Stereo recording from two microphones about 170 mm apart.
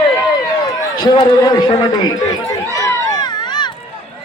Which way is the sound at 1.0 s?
25° left (ahead or behind).